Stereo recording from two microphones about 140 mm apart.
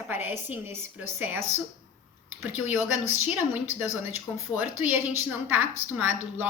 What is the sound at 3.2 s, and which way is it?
A woman's voice, 15° right (ahead or behind).